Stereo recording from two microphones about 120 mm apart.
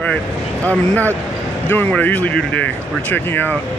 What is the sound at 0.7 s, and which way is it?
Speech, 15° left (ahead or behind).